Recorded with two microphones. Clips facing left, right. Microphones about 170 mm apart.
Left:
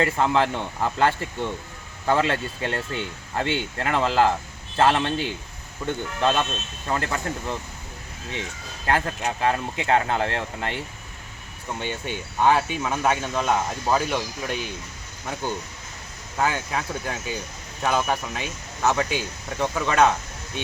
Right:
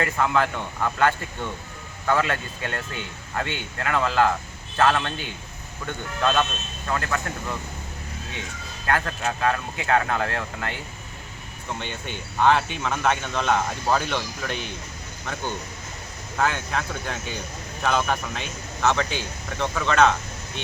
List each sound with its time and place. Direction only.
0.0 s speech: 30° left (ahead or behind)
8.9 s speech: 25° left (ahead or behind)
11.8 s speech: 10° left (ahead or behind)
16.4 s speech: 10° left (ahead or behind)